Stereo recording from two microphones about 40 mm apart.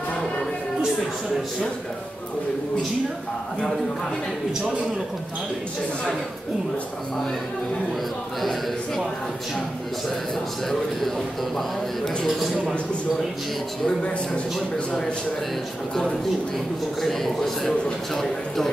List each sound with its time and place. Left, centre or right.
8.4 s a man's voice: centre
10.7 s speech: centre
13.8 s a man's voice: left
15.9 s speech: centre
17.0 s a man's voice: centre